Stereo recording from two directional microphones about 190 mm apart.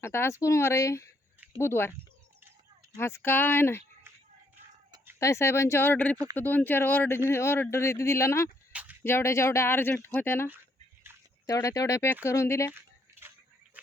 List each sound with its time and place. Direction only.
0.0 s speech: 15° left (ahead or behind)
2.9 s speech: 15° left (ahead or behind)
5.2 s speech: 15° left (ahead or behind)
8.7 s a sound: 10° right (ahead or behind)
9.0 s speech: 15° left (ahead or behind)